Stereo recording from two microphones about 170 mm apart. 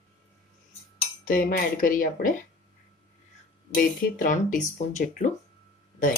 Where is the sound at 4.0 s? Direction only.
50° left (ahead or behind).